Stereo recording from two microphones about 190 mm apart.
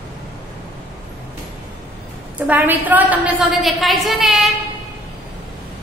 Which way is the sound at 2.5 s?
10° right (ahead or behind).